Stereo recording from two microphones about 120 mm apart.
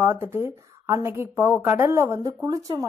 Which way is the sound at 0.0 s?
20° right (ahead or behind).